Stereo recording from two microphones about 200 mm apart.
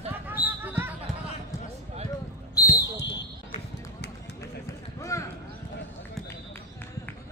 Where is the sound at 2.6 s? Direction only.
20° left (ahead or behind).